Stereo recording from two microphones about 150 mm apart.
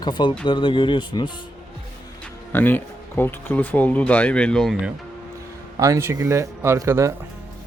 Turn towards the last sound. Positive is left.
turn(degrees=-20)  # may be behind; listen again after turning